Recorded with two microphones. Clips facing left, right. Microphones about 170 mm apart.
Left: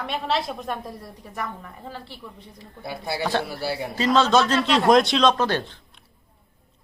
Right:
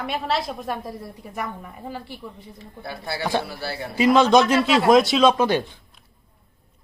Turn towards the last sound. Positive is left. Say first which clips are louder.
# right 3 dB
turn(degrees=-10)  # may be behind; listen again after turning